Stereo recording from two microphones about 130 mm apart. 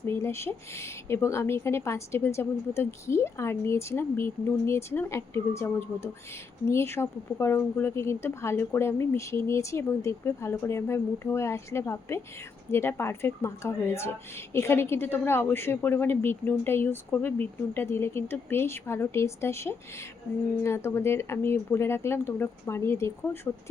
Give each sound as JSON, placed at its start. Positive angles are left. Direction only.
{"t": 0.0, "sound": "a woman's voice", "side_deg": 20}